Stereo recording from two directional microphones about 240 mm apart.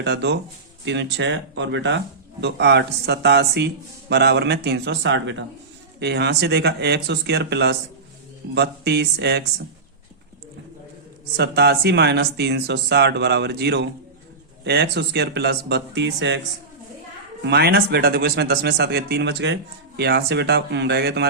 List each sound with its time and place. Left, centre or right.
0.0 s speech: right
11.3 s speech: right
17.4 s speech: right